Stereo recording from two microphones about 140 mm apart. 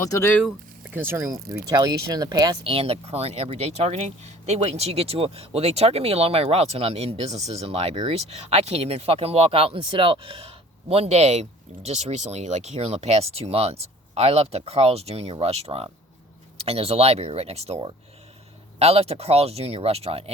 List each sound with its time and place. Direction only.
0.0 s speech: 25° left (ahead or behind)
0.9 s speech: 15° right (ahead or behind)
1.7 s speech: 30° right (ahead or behind)
2.6 s speech: 45° right (ahead or behind)